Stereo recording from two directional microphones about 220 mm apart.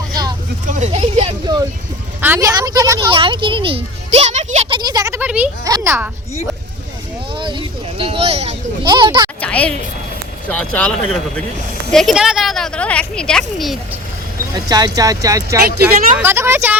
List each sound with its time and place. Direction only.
0.7 s vehicle: 30° right (ahead or behind)
2.2 s a woman's voice: 10° right (ahead or behind)
7.3 s a sound: 20° right (ahead or behind)
9.4 s music: 5° left (ahead or behind)
10.5 s speech: 5° left (ahead or behind)
14.5 s speech: 15° right (ahead or behind)